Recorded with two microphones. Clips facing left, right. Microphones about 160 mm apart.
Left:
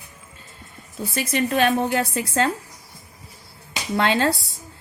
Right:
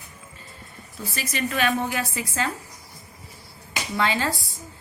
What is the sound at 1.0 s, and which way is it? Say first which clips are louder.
A woman's voice: left 6 dB; 55° left (ahead or behind).